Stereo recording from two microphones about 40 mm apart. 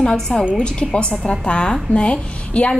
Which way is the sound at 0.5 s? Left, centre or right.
Left.